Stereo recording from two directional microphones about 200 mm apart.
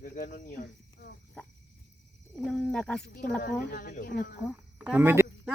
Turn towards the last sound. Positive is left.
turn(degrees=-10)  # may be behind; listen again after turning